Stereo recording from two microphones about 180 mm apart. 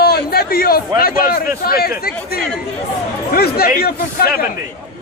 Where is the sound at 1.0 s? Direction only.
55° left (ahead or behind).